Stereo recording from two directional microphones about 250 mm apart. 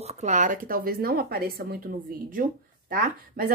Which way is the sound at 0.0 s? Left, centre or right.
Right.